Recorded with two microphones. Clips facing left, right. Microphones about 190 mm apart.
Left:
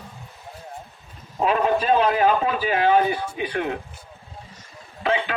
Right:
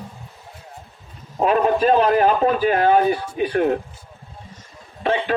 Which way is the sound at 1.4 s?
45° right (ahead or behind).